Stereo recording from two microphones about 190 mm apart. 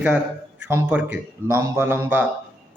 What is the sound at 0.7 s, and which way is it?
A man's voice, 10° right (ahead or behind).